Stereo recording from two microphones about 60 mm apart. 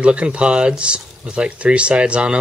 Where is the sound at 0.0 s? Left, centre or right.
Centre.